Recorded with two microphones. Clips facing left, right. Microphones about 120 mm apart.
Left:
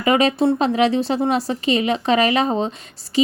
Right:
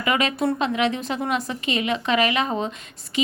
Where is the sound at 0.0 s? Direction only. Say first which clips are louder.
Left 6 dB; 35° left (ahead or behind).